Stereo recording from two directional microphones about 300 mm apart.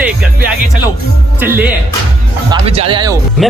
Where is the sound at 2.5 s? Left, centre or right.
Centre.